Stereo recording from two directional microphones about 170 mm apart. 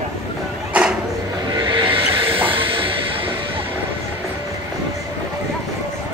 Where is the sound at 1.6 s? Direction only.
30° right (ahead or behind).